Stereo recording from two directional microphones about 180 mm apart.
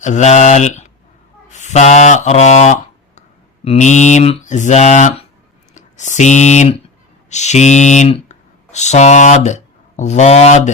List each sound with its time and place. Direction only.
0.0 s speech: 40° left (ahead or behind)
3.2 s mantra: 35° left (ahead or behind)
5.7 s speech: 40° left (ahead or behind)